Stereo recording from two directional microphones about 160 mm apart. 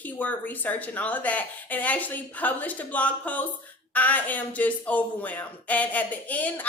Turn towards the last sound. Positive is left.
turn(degrees=10)  # may be behind; listen again after turning